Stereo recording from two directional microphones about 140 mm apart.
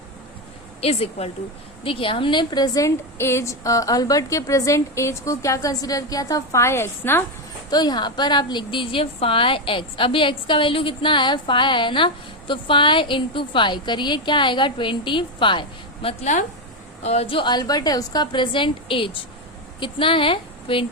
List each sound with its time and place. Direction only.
0.8 s a woman's voice: 45° left (ahead or behind); by 7.3 s 15° left (ahead or behind)
7.7 s a woman's voice: 30° left (ahead or behind)
16.2 s a woman's voice: 60° left (ahead or behind)
17.0 s a woman's voice: 50° left (ahead or behind)